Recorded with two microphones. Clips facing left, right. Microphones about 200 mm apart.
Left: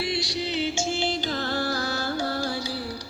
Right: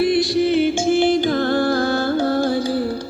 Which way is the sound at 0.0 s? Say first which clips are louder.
Right 12 dB; 55° right (ahead or behind).